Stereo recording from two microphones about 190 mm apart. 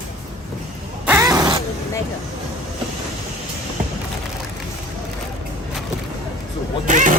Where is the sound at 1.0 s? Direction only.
15° right (ahead or behind).